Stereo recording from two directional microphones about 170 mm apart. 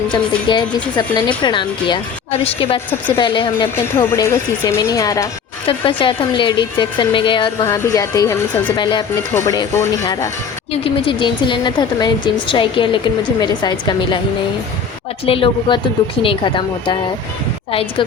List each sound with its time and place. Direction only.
0.4 s a woman's voice: 30° left (ahead or behind)
3.8 s speech: 15° left (ahead or behind)
5.6 s a woman's voice: 30° left (ahead or behind); by 8.7 s 15° left (ahead or behind)
8.7 s a woman's voice: 25° left (ahead or behind)
10.7 s a woman's voice: 30° left (ahead or behind)
15.3 s a woman's voice: 30° left (ahead or behind)